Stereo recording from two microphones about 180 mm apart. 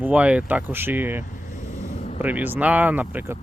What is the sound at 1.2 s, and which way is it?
Vehicle, 45° left (ahead or behind).